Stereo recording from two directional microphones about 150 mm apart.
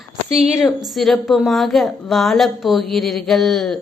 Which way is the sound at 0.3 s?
45° right (ahead or behind).